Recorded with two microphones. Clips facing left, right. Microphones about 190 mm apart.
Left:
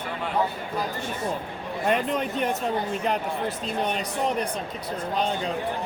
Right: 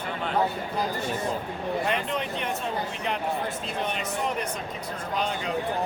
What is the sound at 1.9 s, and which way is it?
Speech, 45° left (ahead or behind).